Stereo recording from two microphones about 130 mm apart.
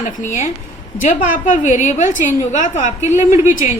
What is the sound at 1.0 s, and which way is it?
A woman's voice, 90° left.